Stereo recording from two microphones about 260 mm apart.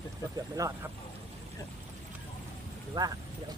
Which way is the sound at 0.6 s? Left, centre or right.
Centre.